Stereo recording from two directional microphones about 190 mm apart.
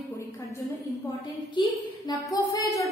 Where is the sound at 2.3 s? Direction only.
20° left (ahead or behind).